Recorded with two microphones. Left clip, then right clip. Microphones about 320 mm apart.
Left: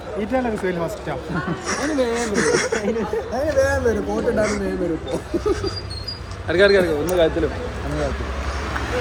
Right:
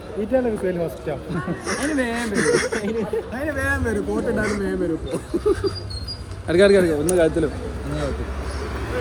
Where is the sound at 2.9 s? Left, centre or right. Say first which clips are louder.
Left 2 dB; right.